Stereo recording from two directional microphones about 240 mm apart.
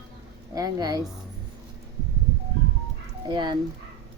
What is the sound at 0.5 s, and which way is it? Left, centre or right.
Speech, centre.